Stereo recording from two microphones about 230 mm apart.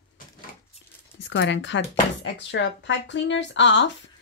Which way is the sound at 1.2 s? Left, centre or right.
Left.